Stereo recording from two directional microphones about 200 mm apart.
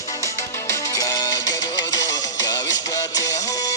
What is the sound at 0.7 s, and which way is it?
Music, 15° left (ahead or behind).